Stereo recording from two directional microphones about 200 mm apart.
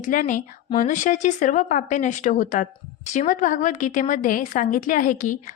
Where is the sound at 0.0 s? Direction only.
40° left (ahead or behind).